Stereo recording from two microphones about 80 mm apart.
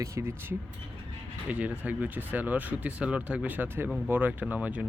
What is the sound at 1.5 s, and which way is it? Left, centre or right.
Speech, centre.